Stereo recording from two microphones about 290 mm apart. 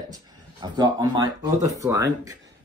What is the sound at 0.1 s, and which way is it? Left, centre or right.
Speech, centre.